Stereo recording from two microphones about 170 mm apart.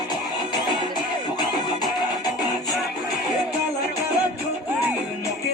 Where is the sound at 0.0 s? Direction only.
25° left (ahead or behind).